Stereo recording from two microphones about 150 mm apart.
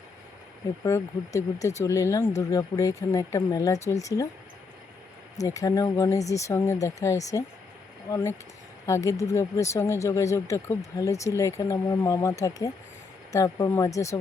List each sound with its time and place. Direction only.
0.9 s speech: 20° left (ahead or behind)
5.4 s speech: 20° left (ahead or behind)